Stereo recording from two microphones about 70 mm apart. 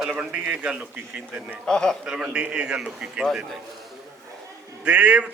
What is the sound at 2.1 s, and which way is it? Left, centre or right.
A man's voice, centre.